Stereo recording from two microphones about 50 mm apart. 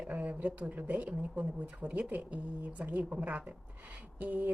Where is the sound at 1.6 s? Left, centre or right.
Right.